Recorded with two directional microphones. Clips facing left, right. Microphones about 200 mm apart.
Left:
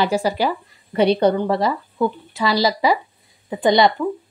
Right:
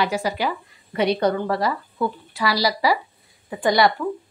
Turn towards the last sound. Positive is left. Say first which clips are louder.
# left 3 dB
turn(degrees=20)  # may be behind; listen again after turning